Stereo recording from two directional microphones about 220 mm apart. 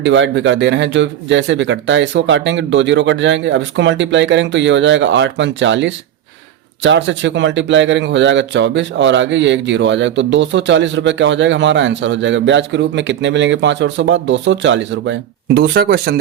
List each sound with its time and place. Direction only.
0.0 s a man's voice: 55° right (ahead or behind)